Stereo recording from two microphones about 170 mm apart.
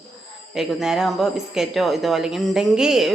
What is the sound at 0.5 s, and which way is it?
Speech, centre (ahead or behind).